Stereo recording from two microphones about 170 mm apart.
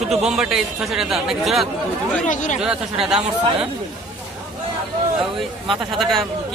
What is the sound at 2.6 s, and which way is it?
Speech, 5° right (ahead or behind).